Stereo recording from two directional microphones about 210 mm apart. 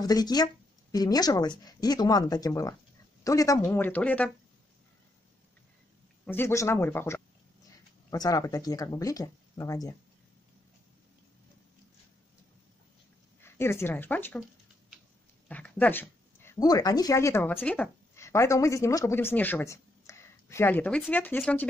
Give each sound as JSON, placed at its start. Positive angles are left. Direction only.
{"t": 0.0, "sound": "speech", "side_deg": 20}
{"t": 6.2, "sound": "speech", "side_deg": 10}
{"t": 13.4, "sound": "speech", "side_deg": 10}
{"t": 15.4, "sound": "a woman's voice", "side_deg": 5}